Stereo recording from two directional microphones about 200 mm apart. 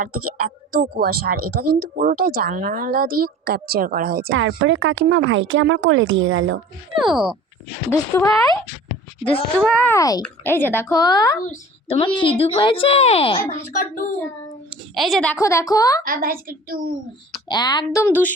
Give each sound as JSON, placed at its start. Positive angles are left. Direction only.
{"t": 0.7, "sound": "speech", "side_deg": -45}
{"t": 4.3, "sound": "speech", "side_deg": -80}
{"t": 7.0, "sound": "a woman's voice", "side_deg": 0}
{"t": 7.9, "sound": "speech", "side_deg": 15}
{"t": 9.6, "sound": "a woman's voice", "side_deg": 5}
{"t": 14.9, "sound": "a woman's voice", "side_deg": 0}
{"t": 15.4, "sound": "speech", "side_deg": 15}
{"t": 16.0, "sound": "speech", "side_deg": -45}
{"t": 17.5, "sound": "speech", "side_deg": 20}